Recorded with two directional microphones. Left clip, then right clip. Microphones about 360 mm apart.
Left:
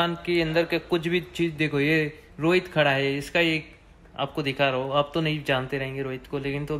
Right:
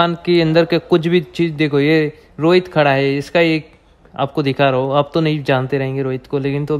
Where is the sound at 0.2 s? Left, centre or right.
Right.